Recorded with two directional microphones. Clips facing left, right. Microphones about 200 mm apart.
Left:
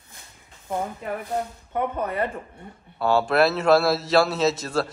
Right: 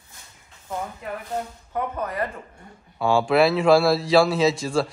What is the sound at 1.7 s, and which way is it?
Speech, 25° left (ahead or behind).